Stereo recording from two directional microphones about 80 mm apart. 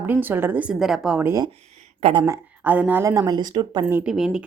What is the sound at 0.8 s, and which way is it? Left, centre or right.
Speech, centre.